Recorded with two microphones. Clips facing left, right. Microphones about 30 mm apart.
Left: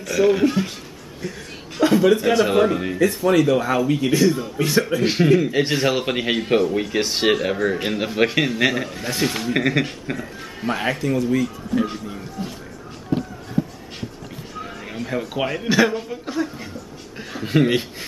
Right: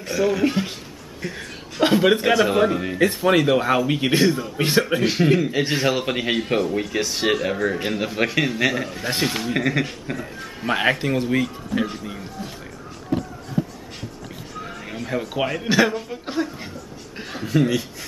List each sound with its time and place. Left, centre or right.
0.2 s speech: centre
0.5 s speech: centre
1.8 s speech: right
2.3 s a man's voice: centre
3.0 s speech: right
5.0 s a man's voice: centre
7.0 s speech: left
7.2 s a man's voice: centre
9.5 s speech: centre
10.7 s speech: right
13.6 s a sound: right
14.6 s speech: centre
17.5 s speech: left